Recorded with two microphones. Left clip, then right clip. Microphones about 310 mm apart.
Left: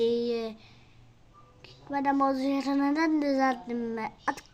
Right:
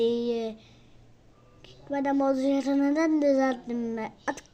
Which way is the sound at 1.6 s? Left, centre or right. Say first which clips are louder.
Even; centre.